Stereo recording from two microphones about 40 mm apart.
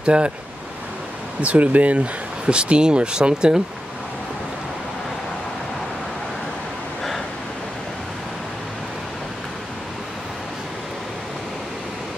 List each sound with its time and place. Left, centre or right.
0.0 s speech: right
1.4 s speech: right